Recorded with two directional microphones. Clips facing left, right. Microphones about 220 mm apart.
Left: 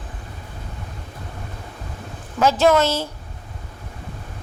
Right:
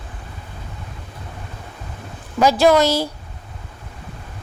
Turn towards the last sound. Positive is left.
turn(degrees=-15)  # may be behind; listen again after turning